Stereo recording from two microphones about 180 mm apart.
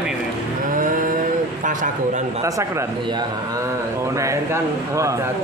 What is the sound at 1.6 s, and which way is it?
Speech, 45° right (ahead or behind).